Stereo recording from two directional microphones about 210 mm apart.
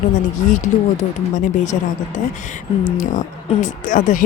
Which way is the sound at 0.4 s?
35° left (ahead or behind).